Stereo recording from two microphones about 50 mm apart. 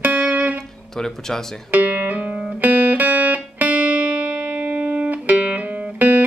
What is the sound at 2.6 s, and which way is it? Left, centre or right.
Music, right.